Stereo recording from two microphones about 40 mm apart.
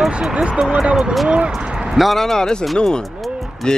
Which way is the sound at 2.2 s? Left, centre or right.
Centre.